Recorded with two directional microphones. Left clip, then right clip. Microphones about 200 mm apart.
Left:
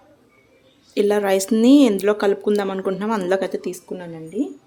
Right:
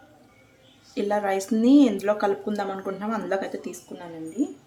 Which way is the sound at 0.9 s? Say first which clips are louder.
Left 7 dB; 55° left (ahead or behind).